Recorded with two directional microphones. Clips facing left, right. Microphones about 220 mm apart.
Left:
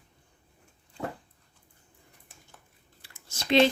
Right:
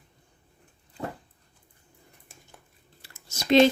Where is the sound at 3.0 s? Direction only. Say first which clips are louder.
Right 2 dB; 40° right (ahead or behind).